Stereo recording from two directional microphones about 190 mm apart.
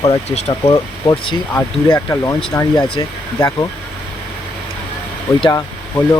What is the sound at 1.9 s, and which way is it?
Speech, 15° left (ahead or behind).